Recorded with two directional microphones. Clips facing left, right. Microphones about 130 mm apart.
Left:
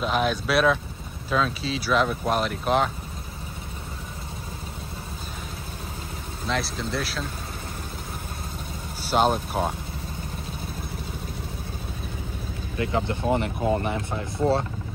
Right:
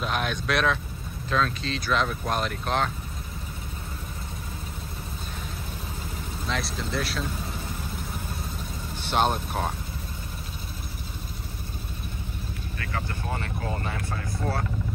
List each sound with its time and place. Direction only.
0.0 s speech: centre (ahead or behind)
6.4 s speech: centre (ahead or behind)
9.1 s speech: centre (ahead or behind)
12.7 s speech: 20° left (ahead or behind)